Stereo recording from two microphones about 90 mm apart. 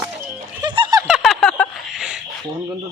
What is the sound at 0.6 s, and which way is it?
Giggle, 70° right (ahead or behind).